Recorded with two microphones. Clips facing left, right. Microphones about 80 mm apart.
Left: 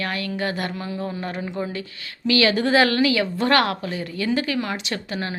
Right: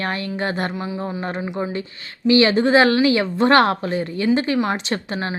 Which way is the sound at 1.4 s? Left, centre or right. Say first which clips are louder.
Right 3 dB; centre.